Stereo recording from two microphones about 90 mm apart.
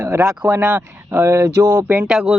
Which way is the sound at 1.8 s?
20° right (ahead or behind).